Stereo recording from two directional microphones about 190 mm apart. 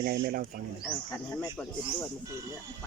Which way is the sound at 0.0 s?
50° right (ahead or behind).